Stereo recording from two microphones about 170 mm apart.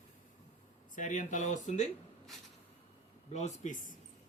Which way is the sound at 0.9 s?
45° left (ahead or behind).